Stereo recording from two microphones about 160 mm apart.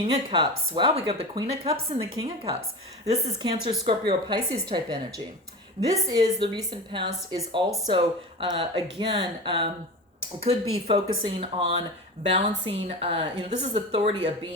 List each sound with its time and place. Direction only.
0.0 s a woman's voice: 35° right (ahead or behind)